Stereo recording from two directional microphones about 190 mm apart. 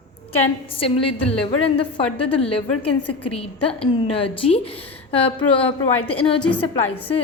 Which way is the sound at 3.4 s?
30° left (ahead or behind).